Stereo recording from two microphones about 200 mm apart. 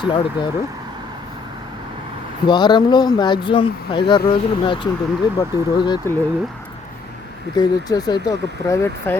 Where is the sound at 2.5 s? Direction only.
20° left (ahead or behind).